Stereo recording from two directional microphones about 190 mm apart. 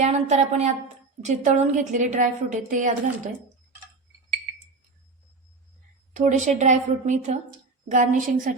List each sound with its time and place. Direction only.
0.0 s a woman's voice: 35° right (ahead or behind)
6.1 s a woman's voice: 40° right (ahead or behind)